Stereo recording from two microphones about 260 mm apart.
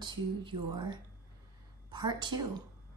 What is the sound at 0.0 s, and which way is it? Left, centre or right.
A woman's voice, centre.